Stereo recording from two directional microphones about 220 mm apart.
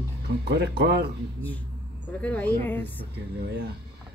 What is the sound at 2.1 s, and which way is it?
A woman's voice, 5° left (ahead or behind).